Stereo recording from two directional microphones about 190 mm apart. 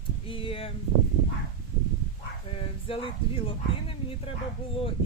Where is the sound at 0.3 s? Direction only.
30° left (ahead or behind).